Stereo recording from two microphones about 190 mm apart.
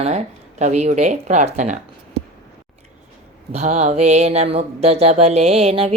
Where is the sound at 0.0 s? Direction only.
35° right (ahead or behind).